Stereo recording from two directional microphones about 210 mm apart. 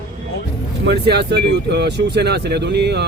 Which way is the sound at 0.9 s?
50° right (ahead or behind).